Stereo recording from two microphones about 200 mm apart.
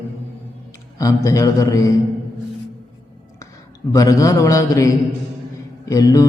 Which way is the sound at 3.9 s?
15° left (ahead or behind).